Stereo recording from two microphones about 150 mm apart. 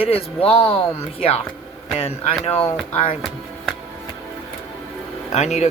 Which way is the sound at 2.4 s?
40° left (ahead or behind).